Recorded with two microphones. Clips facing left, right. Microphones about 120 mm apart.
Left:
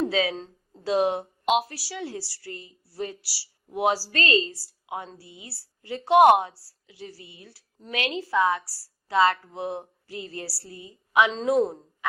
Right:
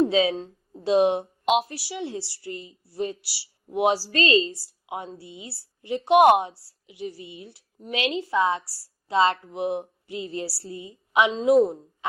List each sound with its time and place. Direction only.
0.0 s a woman's voice: 20° right (ahead or behind)
0.3 s a sound: 10° right (ahead or behind)
0.9 s speech: 20° right (ahead or behind)
11.3 s a woman's voice: 10° right (ahead or behind)